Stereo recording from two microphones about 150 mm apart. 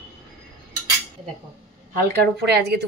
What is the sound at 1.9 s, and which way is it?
Speech, 90° right.